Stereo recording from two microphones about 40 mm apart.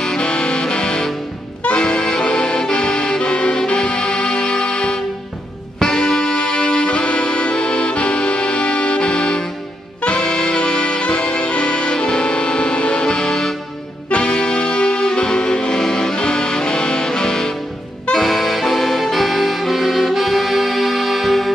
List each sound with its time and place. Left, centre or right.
0.0 s music: centre
1.8 s accordion: left
5.8 s music: centre